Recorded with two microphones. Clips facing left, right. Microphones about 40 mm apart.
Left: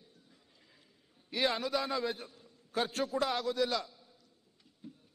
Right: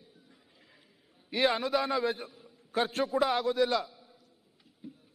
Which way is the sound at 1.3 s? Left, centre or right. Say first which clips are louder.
Right 4 dB; centre.